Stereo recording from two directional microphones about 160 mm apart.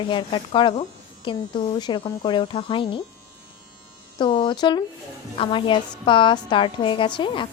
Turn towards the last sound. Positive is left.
turn(degrees=30)  # may be behind; listen again after turning